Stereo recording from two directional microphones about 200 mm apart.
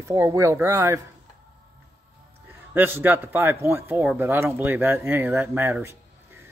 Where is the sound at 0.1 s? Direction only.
15° right (ahead or behind).